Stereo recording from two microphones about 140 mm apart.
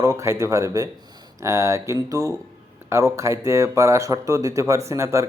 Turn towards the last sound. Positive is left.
turn(degrees=-20)  # may be behind; listen again after turning